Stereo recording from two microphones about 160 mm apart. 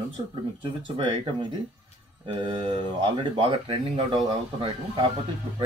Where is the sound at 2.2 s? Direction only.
30° right (ahead or behind).